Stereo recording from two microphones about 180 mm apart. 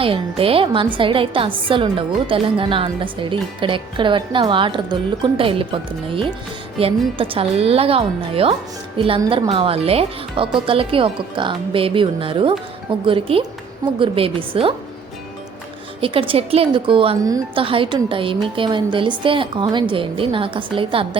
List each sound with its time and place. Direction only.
0.0 s a woman's voice: 30° right (ahead or behind)
16.0 s a woman's voice: 30° right (ahead or behind)
17.6 s a woman's voice: 30° right (ahead or behind)